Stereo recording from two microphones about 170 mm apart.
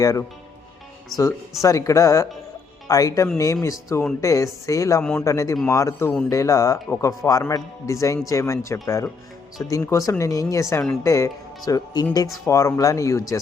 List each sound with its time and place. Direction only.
0.0 s speech: 20° left (ahead or behind)
1.6 s speech: 20° left (ahead or behind)